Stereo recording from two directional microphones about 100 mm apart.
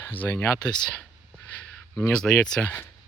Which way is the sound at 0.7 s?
5° left (ahead or behind).